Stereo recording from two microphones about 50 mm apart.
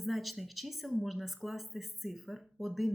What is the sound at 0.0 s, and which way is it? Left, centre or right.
Speech, centre.